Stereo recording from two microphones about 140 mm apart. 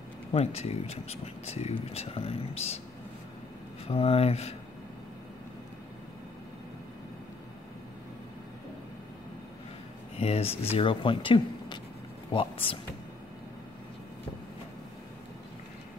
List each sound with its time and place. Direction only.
0.3 s speech: 50° left (ahead or behind)
3.8 s speech: 45° left (ahead or behind)
10.1 s speech: 45° left (ahead or behind)